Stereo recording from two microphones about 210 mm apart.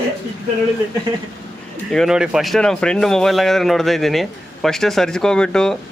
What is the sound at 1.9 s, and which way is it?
Speech, centre (ahead or behind).